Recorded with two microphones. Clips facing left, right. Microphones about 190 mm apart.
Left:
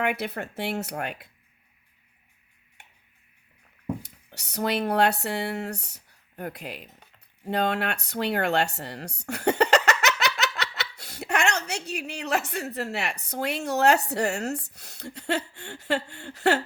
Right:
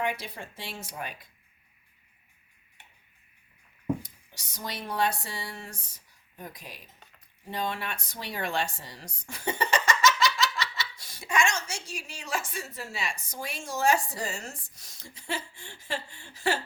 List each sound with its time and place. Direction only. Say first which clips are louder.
0.0 s speech: left 5 dB; 65° left (ahead or behind)
4.0 s speech: left 4 dB; 65° left (ahead or behind)